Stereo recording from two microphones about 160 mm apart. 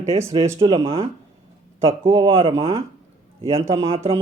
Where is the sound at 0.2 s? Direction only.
20° right (ahead or behind); by 2.6 s 35° right (ahead or behind).